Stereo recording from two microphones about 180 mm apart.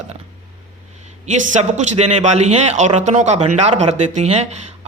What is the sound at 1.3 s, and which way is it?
Speech, 40° right (ahead or behind).